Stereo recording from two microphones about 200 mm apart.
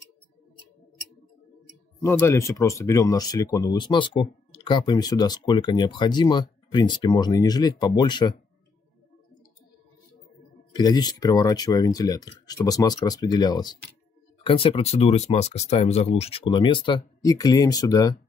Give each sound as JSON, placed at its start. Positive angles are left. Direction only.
{"t": 2.0, "sound": "speech", "side_deg": 10}
{"t": 10.7, "sound": "speech", "side_deg": 20}